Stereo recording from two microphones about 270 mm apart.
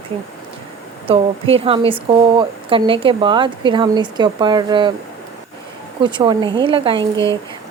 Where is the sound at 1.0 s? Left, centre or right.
Right.